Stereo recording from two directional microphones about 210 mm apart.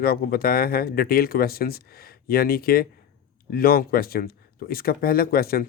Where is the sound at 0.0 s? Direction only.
45° left (ahead or behind).